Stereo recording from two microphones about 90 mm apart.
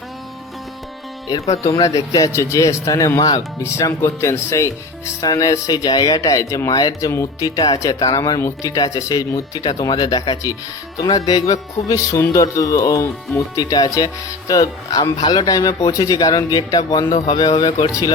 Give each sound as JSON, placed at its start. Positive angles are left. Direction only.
{"t": 1.3, "sound": "speech", "side_deg": 35}
{"t": 3.6, "sound": "speech", "side_deg": 30}
{"t": 8.4, "sound": "speech", "side_deg": 30}
{"t": 8.7, "sound": "speech", "side_deg": 40}